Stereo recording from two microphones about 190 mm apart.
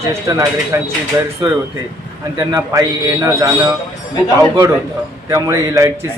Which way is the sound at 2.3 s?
15° right (ahead or behind).